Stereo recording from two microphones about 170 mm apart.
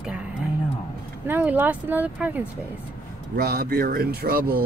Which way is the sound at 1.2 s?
10° right (ahead or behind).